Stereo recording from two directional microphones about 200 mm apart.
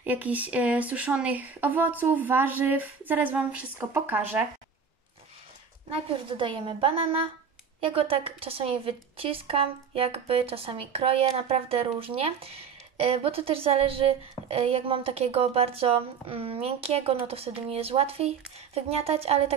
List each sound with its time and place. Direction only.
0.0 s speech: 10° right (ahead or behind)
5.9 s a woman's voice: 25° right (ahead or behind)